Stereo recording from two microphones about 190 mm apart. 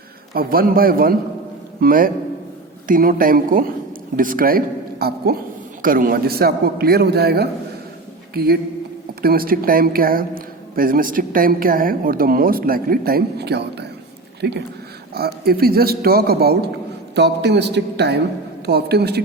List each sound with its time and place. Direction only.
0.3 s a man's voice: 50° right (ahead or behind)